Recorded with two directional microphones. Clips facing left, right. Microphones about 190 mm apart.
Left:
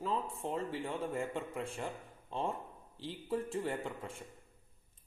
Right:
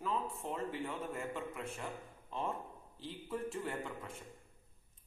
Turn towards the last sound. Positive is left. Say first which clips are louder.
# left 2 dB
turn(degrees=30)  # may be behind; listen again after turning